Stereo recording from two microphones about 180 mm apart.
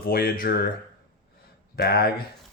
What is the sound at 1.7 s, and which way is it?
Speech, 60° left (ahead or behind).